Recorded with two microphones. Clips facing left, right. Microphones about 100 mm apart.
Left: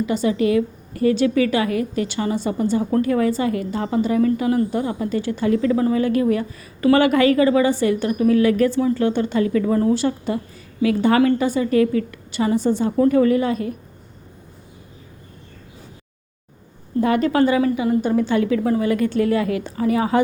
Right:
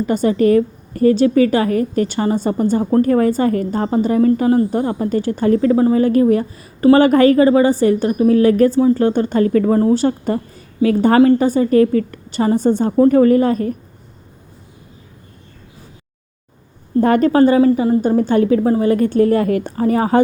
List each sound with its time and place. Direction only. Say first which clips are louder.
0.0 s a woman's voice: right 5 dB; 45° right (ahead or behind)
17.0 s a woman's voice: right 5 dB; 45° right (ahead or behind)